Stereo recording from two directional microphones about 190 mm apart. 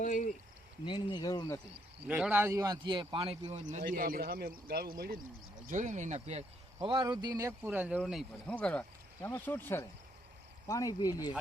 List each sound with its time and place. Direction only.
0.0 s speech: 45° left (ahead or behind)
0.9 s speech: 25° left (ahead or behind)
2.0 s speech: 5° right (ahead or behind); by 5.2 s 50° right (ahead or behind)
5.6 s speech: 40° right (ahead or behind)
6.8 s speech: 25° right (ahead or behind); by 11.3 s 20° left (ahead or behind)